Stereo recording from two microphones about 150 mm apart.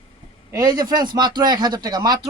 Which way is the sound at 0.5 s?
25° right (ahead or behind).